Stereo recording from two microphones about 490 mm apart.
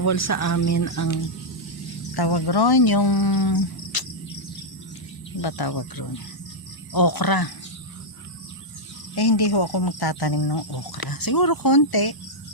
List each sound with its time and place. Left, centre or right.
0.0 s speech: left
2.1 s speech: left
5.4 s speech: left
9.1 s speech: left